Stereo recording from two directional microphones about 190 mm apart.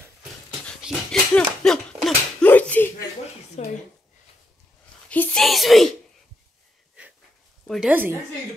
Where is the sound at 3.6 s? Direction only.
35° left (ahead or behind).